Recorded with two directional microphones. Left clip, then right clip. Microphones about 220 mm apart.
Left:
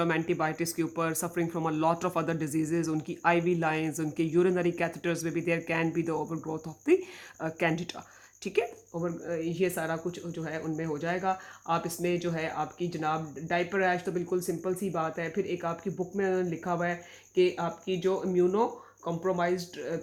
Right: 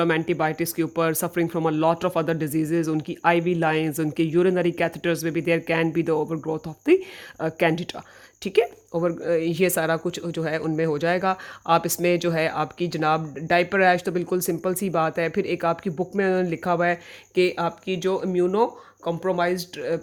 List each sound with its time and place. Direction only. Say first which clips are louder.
0.0 s speech: right 6 dB; 30° right (ahead or behind)
8.9 s speech: right 11 dB; 45° right (ahead or behind)